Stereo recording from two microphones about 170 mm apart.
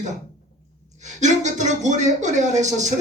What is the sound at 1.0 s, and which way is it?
Speech, 45° right (ahead or behind).